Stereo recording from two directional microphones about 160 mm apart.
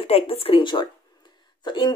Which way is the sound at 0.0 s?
35° left (ahead or behind).